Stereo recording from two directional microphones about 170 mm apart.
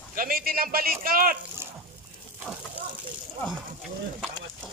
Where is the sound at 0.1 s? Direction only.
55° right (ahead or behind).